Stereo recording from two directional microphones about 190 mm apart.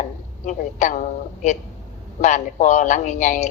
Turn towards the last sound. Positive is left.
turn(degrees=40)  # may be behind; listen again after turning